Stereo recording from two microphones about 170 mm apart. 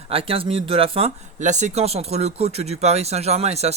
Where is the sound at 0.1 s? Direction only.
35° right (ahead or behind).